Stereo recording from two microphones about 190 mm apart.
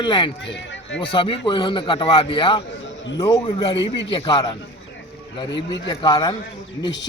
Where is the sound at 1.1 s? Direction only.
25° left (ahead or behind).